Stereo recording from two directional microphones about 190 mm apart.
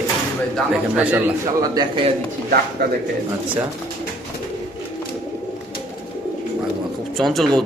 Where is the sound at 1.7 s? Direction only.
25° right (ahead or behind).